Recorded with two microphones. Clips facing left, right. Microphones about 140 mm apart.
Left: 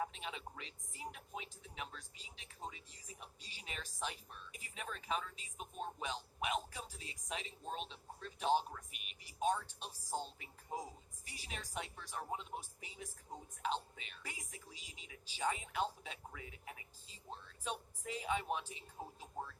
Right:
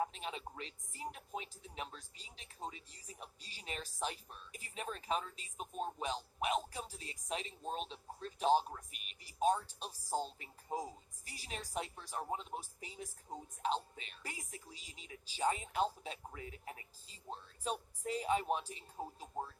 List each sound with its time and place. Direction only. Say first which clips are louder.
0.0 s speech: right 3 dB; 35° right (ahead or behind)